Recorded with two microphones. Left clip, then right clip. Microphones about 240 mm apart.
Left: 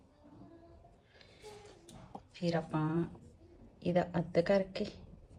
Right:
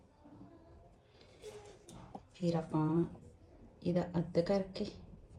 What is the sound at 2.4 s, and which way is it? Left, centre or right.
Speech, left.